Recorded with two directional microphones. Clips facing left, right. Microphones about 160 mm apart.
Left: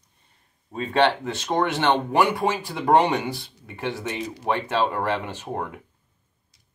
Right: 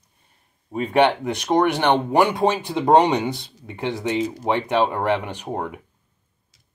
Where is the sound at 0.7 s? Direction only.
15° right (ahead or behind).